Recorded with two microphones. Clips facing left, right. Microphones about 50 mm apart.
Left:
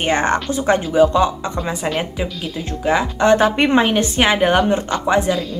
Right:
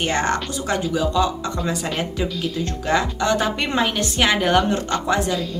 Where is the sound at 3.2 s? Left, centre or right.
Left.